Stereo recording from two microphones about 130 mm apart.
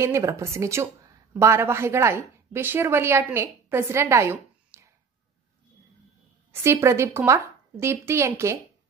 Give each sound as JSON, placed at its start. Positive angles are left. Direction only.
{"t": 0.0, "sound": "a woman's voice", "side_deg": -20}
{"t": 6.5, "sound": "a woman's voice", "side_deg": -20}